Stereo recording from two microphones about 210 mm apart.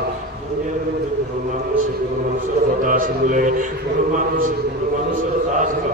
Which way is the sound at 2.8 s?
40° right (ahead or behind).